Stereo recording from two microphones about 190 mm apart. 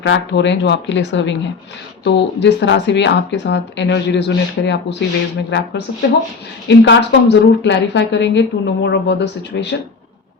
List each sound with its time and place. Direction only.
0.0 s a woman's voice: 70° left (ahead or behind)